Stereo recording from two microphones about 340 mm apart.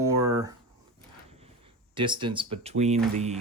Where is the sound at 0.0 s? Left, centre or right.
Centre.